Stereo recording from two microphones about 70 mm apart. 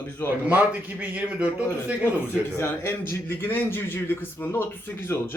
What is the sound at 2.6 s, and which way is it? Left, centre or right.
A man's voice, left.